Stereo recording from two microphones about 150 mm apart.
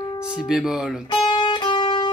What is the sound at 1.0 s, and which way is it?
Music, 30° left (ahead or behind).